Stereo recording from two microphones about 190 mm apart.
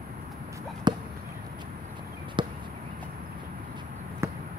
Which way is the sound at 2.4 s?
25° right (ahead or behind).